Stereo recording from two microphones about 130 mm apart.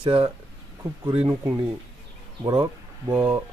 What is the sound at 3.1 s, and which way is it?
Speech, 15° right (ahead or behind).